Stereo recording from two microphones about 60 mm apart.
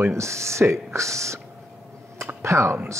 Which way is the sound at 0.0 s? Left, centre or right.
Right.